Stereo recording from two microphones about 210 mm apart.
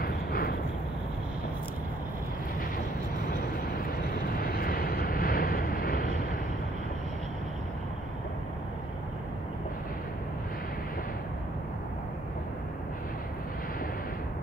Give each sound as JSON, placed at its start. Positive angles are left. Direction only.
{"t": 0.0, "sound": "vehicle", "side_deg": 45}
{"t": 3.3, "sound": "vehicle", "side_deg": 45}